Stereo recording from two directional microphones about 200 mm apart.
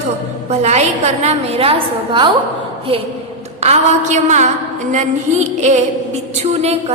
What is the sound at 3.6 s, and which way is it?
A woman's voice, 35° right (ahead or behind).